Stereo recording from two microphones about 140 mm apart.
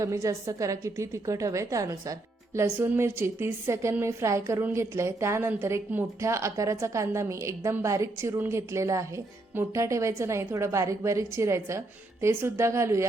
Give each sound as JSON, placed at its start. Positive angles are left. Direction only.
{"t": 0.0, "sound": "a woman's voice", "side_deg": -20}